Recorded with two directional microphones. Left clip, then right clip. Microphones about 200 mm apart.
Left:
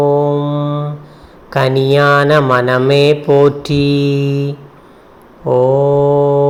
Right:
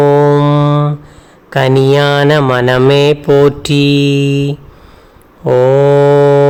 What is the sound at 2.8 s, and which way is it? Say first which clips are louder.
Mantra: right 2 dB; 20° right (ahead or behind).